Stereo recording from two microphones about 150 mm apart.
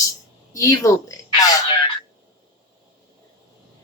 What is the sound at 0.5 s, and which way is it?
A woman's voice, 20° left (ahead or behind).